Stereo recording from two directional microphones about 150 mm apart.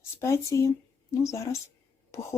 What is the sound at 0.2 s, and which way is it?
Speech, 20° left (ahead or behind).